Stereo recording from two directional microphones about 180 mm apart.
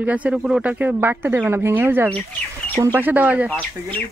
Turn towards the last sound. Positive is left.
turn(degrees=10)  # may be behind; listen again after turning